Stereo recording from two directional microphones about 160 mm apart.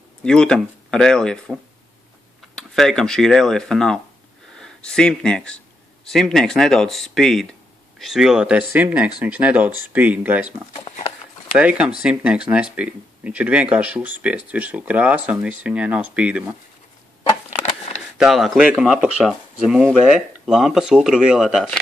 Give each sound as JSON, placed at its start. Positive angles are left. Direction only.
{"t": 0.2, "sound": "speech", "side_deg": 5}
{"t": 11.5, "sound": "speech", "side_deg": -5}
{"t": 18.1, "sound": "speech", "side_deg": 0}